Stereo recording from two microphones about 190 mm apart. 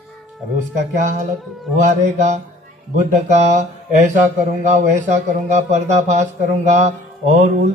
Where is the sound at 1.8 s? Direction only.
40° right (ahead or behind).